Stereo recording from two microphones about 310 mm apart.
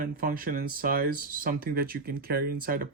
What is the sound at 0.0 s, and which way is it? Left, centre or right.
Speech, right.